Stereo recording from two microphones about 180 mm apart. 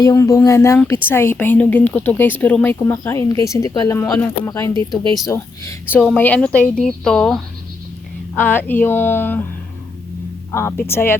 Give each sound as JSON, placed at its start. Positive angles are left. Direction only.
{"t": 0.0, "sound": "speech", "side_deg": 20}
{"t": 10.5, "sound": "speech", "side_deg": 15}